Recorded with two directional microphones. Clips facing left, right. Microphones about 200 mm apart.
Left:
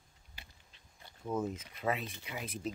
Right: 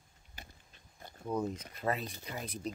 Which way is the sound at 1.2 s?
Centre (ahead or behind).